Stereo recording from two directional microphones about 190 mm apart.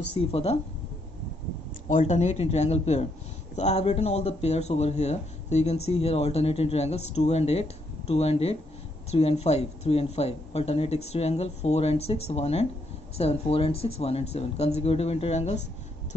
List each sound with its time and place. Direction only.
0.3 s speech: 30° left (ahead or behind)
1.9 s speech: 40° left (ahead or behind)